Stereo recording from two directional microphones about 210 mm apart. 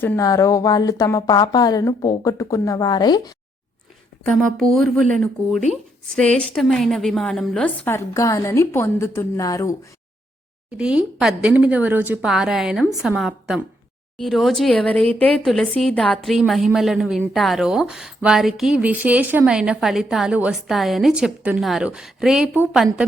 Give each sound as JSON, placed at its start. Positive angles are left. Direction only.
{"t": 0.0, "sound": "speech", "side_deg": 10}
{"t": 4.5, "sound": "speech", "side_deg": 0}
{"t": 10.8, "sound": "speech", "side_deg": -5}